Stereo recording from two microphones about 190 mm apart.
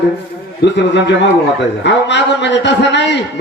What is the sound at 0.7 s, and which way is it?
A man's voice, 65° left (ahead or behind).